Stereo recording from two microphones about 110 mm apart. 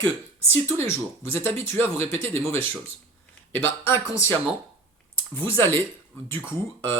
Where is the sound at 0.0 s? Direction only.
20° left (ahead or behind).